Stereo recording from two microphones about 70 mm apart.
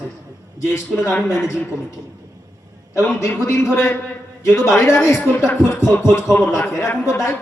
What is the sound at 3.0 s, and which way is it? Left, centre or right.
A man's voice, left.